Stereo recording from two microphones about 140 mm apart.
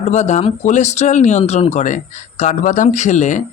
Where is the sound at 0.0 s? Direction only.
55° left (ahead or behind).